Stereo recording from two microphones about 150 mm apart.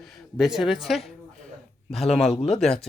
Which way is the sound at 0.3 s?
5° right (ahead or behind).